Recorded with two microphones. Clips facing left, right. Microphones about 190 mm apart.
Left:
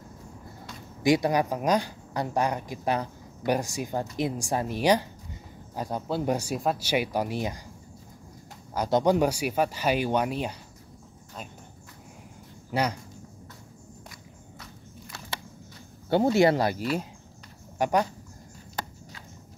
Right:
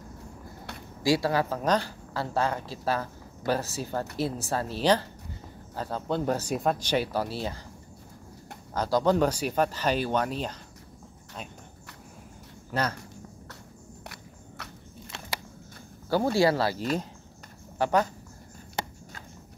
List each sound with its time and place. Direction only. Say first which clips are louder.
1.0 s a woman's voice: left 2 dB; 20° left (ahead or behind)
8.7 s a woman's voice: left 1 dB; 15° left (ahead or behind)
12.7 s a woman's voice: left 2 dB; 15° left (ahead or behind)
15.0 s a sound: right 1 dB; 20° right (ahead or behind)
16.1 s speech: left 2 dB; 25° left (ahead or behind)